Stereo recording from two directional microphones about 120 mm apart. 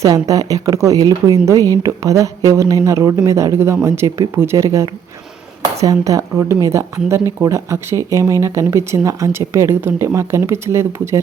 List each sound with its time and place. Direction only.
0.0 s speech: 30° right (ahead or behind)